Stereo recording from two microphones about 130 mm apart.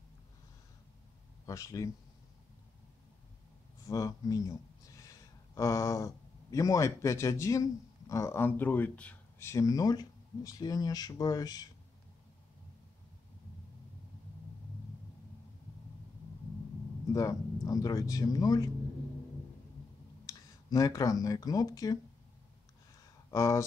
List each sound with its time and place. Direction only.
1.4 s speech: 25° left (ahead or behind)
3.8 s speech: 25° left (ahead or behind); by 9.5 s 10° left (ahead or behind)
9.5 s speech: 25° left (ahead or behind)
17.1 s speech: 25° left (ahead or behind)
20.2 s speech: 25° left (ahead or behind)
23.3 s speech: 25° left (ahead or behind)